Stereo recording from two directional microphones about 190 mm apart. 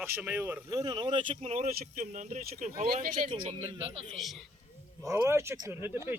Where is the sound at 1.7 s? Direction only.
45° right (ahead or behind).